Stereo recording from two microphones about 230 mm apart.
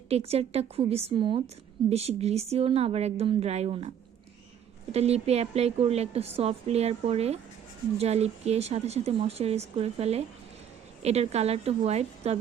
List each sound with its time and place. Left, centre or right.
0.1 s a woman's voice: right